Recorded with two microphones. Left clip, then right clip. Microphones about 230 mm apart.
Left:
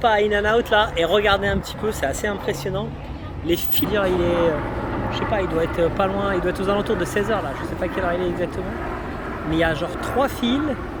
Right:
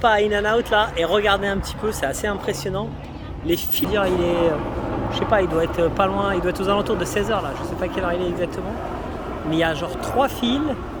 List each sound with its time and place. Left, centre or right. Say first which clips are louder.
0.0 s speech: even; centre
4.1 s speech: even; right
5.1 s speech: right 4 dB; centre
5.7 s speech: right 1 dB; centre
9.5 s speech: even; centre